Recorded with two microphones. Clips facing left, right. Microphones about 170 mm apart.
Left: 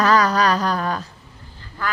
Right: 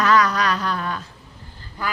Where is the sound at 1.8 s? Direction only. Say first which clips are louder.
Left 1 dB; 10° right (ahead or behind).